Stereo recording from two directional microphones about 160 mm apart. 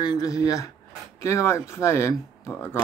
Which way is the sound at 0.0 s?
25° left (ahead or behind).